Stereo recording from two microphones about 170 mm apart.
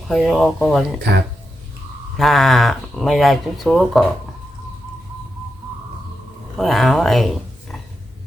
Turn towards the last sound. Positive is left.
turn(degrees=0)  # may be behind; listen again after turning